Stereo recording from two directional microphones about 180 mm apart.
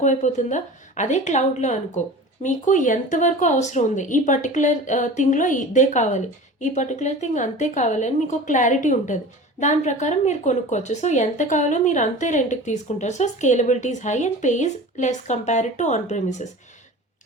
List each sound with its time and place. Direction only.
0.0 s a woman's voice: 40° left (ahead or behind)